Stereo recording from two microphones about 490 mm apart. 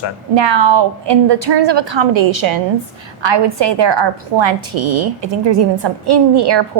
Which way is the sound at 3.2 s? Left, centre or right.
Right.